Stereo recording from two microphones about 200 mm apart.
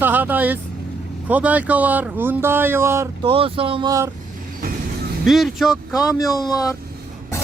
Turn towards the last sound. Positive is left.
turn(degrees=20)  # may be behind; listen again after turning